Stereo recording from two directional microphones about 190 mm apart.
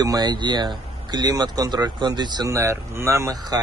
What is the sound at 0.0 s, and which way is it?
Speech, 20° right (ahead or behind).